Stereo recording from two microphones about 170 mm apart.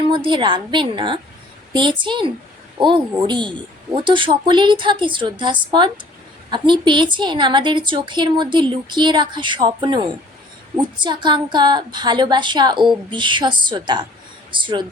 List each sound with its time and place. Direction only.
0.1 s a woman's voice: 30° right (ahead or behind)
11.0 s a woman's voice: 25° right (ahead or behind)